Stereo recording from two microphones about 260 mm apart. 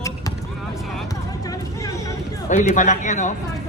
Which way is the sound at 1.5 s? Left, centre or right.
Centre.